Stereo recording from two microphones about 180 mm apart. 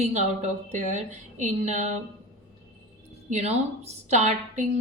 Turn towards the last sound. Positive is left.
turn(degrees=-40)  # may be behind; listen again after turning